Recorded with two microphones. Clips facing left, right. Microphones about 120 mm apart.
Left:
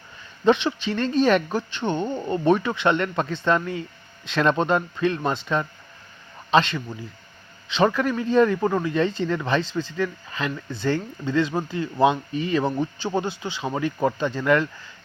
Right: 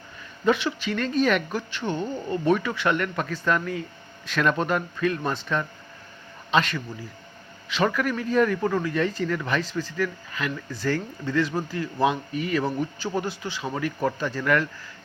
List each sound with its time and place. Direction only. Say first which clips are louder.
0.4 s speech: left 3 dB; 25° left (ahead or behind)